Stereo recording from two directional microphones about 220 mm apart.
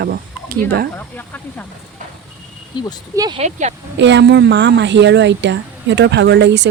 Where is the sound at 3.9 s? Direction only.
55° right (ahead or behind).